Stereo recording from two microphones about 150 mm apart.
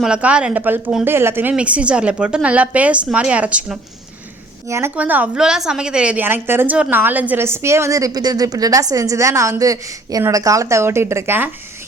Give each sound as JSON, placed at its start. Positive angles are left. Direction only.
{"t": 0.0, "sound": "a woman's voice", "side_deg": -5}